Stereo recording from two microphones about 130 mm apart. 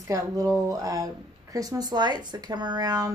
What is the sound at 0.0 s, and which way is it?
Speech, 25° right (ahead or behind).